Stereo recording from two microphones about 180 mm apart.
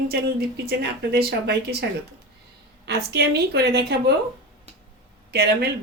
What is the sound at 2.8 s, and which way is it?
A woman's voice, 65° right (ahead or behind).